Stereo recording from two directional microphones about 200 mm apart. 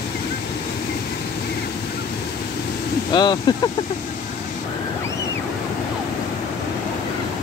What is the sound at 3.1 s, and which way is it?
Speech, 20° left (ahead or behind).